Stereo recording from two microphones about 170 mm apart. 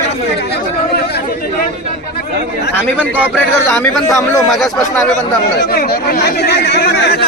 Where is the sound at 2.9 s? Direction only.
10° right (ahead or behind).